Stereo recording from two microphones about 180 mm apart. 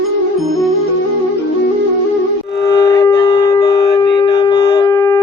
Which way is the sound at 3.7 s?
65° left (ahead or behind).